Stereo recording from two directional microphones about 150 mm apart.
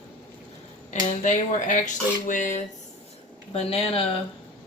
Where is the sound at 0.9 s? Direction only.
55° left (ahead or behind).